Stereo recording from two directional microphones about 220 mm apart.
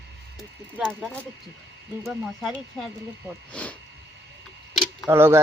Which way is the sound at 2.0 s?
Centre (ahead or behind).